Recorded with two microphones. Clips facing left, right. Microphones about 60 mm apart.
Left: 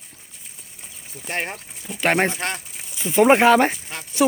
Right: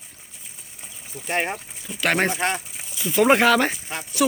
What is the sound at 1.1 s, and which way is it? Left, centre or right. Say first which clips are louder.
Speech: right 3 dB; centre.